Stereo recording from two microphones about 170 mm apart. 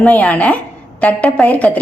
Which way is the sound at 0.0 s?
10° left (ahead or behind).